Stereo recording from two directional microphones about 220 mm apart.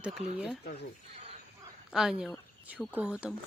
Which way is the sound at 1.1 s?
30° right (ahead or behind).